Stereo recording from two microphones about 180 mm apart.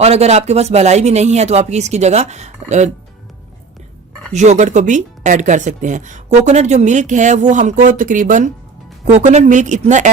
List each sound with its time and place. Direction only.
0.0 s speech: 35° right (ahead or behind)
4.3 s speech: 40° right (ahead or behind)